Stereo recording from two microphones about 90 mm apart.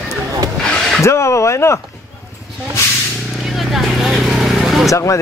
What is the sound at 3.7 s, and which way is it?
Vehicle, 5° right (ahead or behind).